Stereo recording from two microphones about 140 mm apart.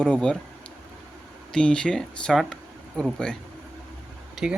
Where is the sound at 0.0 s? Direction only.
5° left (ahead or behind).